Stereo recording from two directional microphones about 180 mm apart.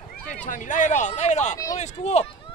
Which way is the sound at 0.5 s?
45° left (ahead or behind).